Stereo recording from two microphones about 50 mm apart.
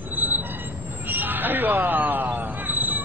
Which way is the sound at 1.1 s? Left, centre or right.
Right.